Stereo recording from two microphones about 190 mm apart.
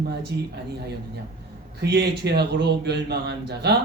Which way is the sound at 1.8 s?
60° right (ahead or behind).